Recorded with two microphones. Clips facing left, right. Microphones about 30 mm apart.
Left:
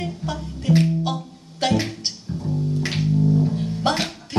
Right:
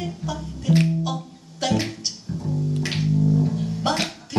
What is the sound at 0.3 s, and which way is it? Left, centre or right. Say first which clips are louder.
Music: left 1 dB; left.